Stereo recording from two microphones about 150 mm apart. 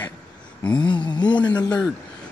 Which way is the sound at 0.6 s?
10° left (ahead or behind).